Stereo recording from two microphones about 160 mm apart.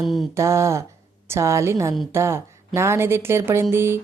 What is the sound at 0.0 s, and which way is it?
Mantra, centre (ahead or behind).